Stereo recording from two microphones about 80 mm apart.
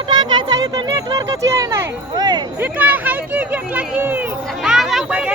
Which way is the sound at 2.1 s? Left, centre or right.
Right.